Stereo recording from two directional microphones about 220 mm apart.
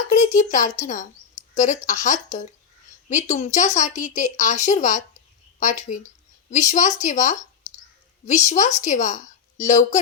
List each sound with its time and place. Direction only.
0.1 s a woman's voice: 35° left (ahead or behind)
8.4 s a woman's voice: 35° left (ahead or behind)